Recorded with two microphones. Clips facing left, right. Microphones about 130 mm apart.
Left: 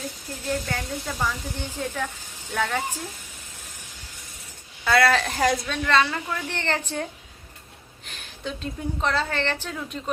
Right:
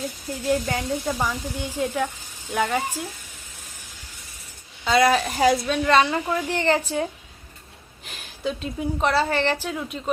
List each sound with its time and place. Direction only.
0.4 s speech: 15° right (ahead or behind)
4.9 s speech: 20° right (ahead or behind)
8.0 s speech: 5° right (ahead or behind)